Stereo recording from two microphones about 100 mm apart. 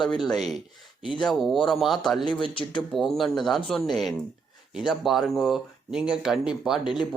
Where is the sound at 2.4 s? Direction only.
55° left (ahead or behind).